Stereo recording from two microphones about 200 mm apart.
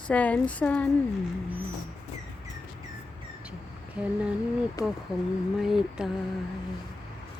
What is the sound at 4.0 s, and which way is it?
Speech, 5° right (ahead or behind).